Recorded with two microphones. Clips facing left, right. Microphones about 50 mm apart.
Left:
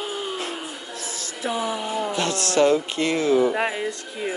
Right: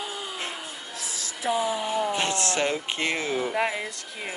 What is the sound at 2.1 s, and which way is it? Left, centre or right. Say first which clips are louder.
Speech: left 4 dB; right.